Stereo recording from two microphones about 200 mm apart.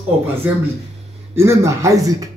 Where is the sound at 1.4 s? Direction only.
15° right (ahead or behind).